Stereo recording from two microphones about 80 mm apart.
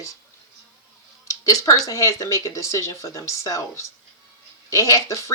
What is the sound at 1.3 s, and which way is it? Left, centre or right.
Speech, left.